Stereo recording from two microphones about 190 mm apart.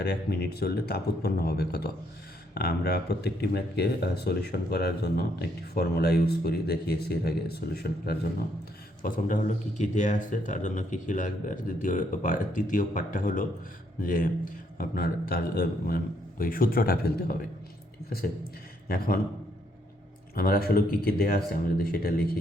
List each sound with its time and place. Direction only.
0.0 s speech: 55° left (ahead or behind)
9.0 s speech: 45° left (ahead or behind)
18.9 s speech: 50° left (ahead or behind)
20.3 s speech: 50° left (ahead or behind)